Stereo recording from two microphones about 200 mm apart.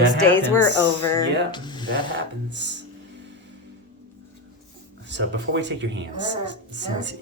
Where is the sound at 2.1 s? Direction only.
60° right (ahead or behind).